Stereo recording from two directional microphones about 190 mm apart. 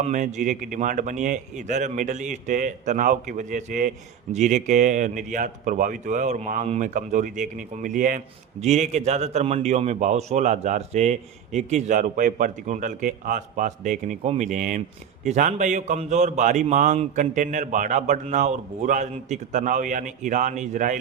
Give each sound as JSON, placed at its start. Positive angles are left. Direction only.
{"t": 0.0, "sound": "a man's voice", "side_deg": -40}